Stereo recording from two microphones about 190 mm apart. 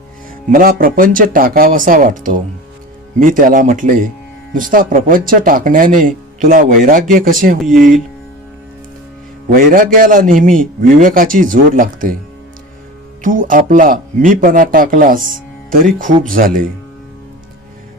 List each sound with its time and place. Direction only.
0.5 s speech: 50° right (ahead or behind)
7.6 s speech: centre (ahead or behind)
9.5 s speech: 50° right (ahead or behind)
13.2 s speech: 45° right (ahead or behind)